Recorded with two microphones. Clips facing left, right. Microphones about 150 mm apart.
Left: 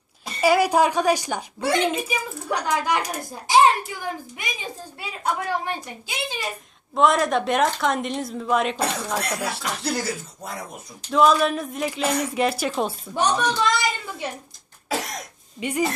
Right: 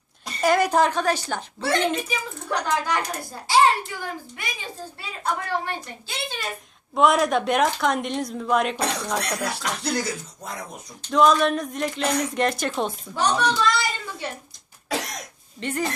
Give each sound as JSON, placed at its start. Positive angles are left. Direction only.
{"t": 0.3, "sound": "a woman's voice", "side_deg": 5}
{"t": 6.9, "sound": "a woman's voice", "side_deg": 0}
{"t": 13.1, "sound": "a woman's voice", "side_deg": 15}
{"t": 14.8, "sound": "cough", "side_deg": 0}
{"t": 15.6, "sound": "a woman's voice", "side_deg": 10}